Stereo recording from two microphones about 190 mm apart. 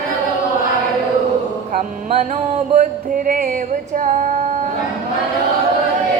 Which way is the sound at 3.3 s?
50° right (ahead or behind).